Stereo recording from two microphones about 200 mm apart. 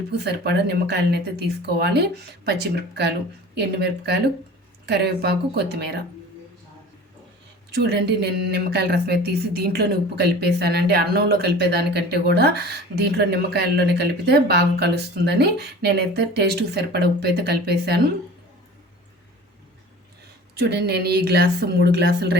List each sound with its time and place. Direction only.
0.1 s speech: 55° right (ahead or behind)
7.7 s speech: 55° right (ahead or behind)
20.6 s a woman's voice: 50° right (ahead or behind)